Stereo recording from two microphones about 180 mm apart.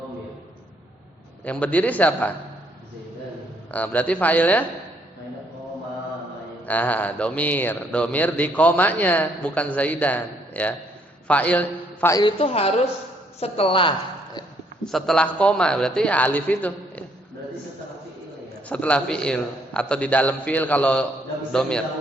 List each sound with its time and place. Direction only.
1.5 s speech: 10° left (ahead or behind)
3.7 s speech: 10° left (ahead or behind)
6.7 s speech: 10° left (ahead or behind)
12.2 s a woman's voice: 30° left (ahead or behind)
14.8 s a man's voice: centre (ahead or behind)
18.7 s a man's voice: 5° left (ahead or behind)